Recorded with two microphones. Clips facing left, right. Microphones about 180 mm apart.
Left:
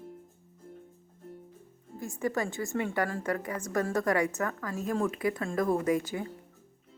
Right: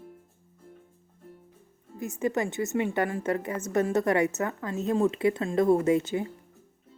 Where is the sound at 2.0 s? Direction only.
20° right (ahead or behind).